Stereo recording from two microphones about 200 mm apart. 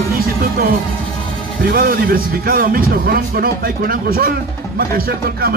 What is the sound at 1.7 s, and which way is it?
Speech, 45° right (ahead or behind).